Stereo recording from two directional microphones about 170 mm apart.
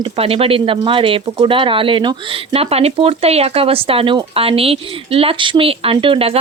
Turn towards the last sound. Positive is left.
turn(degrees=-30)  # may be behind; listen again after turning